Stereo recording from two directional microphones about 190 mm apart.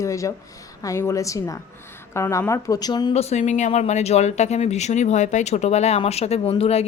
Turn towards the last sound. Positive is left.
turn(degrees=30)  # may be behind; listen again after turning